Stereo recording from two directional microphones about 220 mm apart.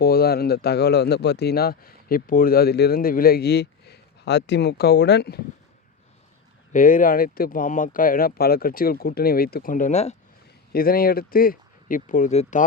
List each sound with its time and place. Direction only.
0.0 s speech: 45° left (ahead or behind)
6.7 s speech: 40° left (ahead or behind)
10.7 s speech: 40° left (ahead or behind)